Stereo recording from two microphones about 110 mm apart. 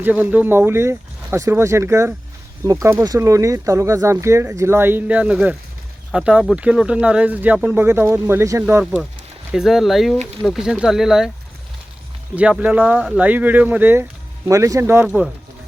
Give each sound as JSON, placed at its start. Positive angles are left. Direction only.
{"t": 0.0, "sound": "speech", "side_deg": -15}
{"t": 8.8, "sound": "speech", "side_deg": -5}
{"t": 12.4, "sound": "speech", "side_deg": -10}